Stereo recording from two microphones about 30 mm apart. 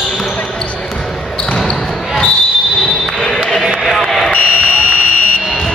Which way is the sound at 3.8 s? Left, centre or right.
Centre.